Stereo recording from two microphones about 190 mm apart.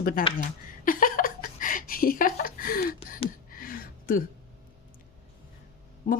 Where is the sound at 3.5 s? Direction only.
50° left (ahead or behind).